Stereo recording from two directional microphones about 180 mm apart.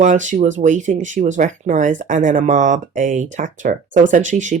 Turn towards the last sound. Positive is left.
turn(degrees=-45)  # may be behind; listen again after turning